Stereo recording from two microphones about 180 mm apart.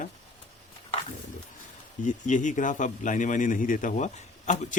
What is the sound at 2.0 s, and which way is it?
A man's voice, 45° left (ahead or behind).